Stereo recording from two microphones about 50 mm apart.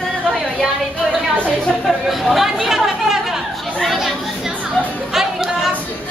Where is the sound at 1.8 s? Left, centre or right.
Centre.